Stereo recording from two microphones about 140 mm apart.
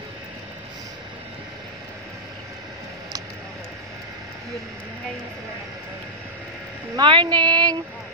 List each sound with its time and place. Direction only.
7.0 s speech: 35° right (ahead or behind)